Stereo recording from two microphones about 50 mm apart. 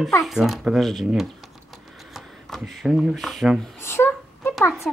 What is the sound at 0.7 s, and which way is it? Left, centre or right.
Speech, centre.